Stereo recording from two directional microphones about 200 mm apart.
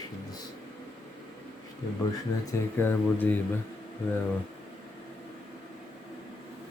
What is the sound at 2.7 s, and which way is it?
Speech, 10° left (ahead or behind).